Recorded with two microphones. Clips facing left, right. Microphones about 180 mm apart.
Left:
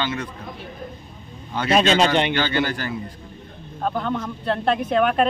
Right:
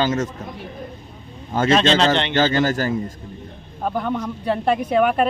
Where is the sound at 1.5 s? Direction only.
45° right (ahead or behind).